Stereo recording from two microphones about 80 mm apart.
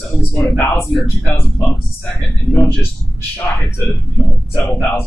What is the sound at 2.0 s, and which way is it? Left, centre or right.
Speech, left.